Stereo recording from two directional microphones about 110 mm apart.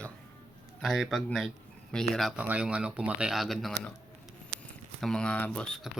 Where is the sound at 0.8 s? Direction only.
Centre (ahead or behind).